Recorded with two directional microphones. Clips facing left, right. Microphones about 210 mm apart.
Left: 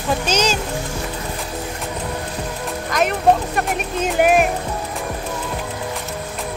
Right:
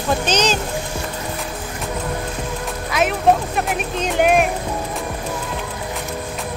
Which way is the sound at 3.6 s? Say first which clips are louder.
Even; centre (ahead or behind).